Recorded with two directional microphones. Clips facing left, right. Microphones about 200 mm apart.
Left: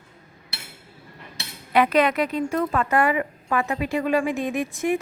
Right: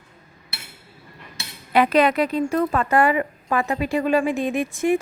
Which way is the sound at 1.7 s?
30° right (ahead or behind).